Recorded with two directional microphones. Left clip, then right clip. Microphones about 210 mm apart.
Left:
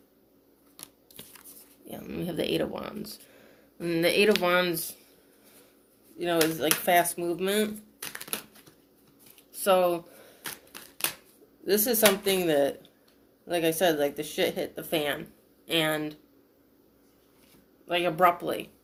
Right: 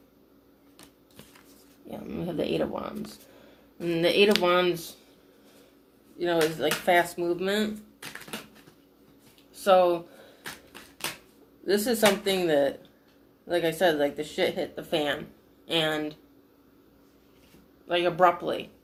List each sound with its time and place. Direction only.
0.8 s scissors: 40° left (ahead or behind)
1.9 s speech: 40° left (ahead or behind)
6.1 s speech: 45° left (ahead or behind)
8.0 s typewriter: 40° left (ahead or behind)
9.6 s speech: 45° left (ahead or behind)
10.7 s typewriter: 40° left (ahead or behind)
11.6 s speech: 45° left (ahead or behind)
17.8 s speech: 45° left (ahead or behind)